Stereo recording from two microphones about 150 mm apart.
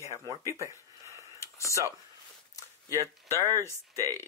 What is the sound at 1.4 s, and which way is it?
Whispering, 20° left (ahead or behind).